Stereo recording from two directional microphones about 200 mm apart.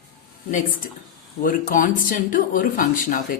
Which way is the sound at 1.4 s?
40° left (ahead or behind).